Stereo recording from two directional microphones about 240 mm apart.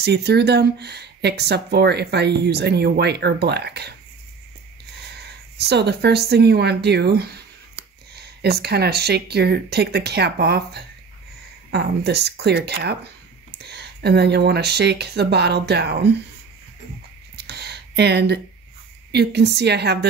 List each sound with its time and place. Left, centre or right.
0.0 s speech: right
5.6 s speech: right
17.4 s a sound: right
19.1 s speech: right